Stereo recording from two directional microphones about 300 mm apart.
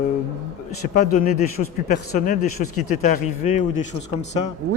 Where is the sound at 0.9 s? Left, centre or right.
Left.